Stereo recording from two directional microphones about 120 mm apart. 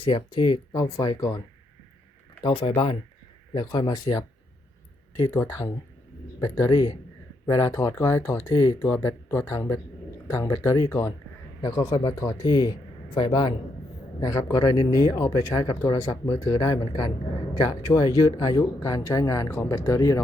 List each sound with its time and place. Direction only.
0.1 s speech: 40° left (ahead or behind)
2.4 s speech: 45° left (ahead or behind)
5.3 s speech: 25° left (ahead or behind); by 13.5 s 40° left (ahead or behind)
14.2 s speech: 30° left (ahead or behind)